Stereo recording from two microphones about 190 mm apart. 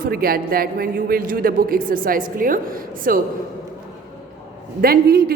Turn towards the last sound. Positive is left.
turn(degrees=-55)  # may be behind; listen again after turning